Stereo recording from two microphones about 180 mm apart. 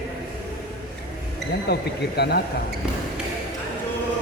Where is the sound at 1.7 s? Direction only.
65° left (ahead or behind).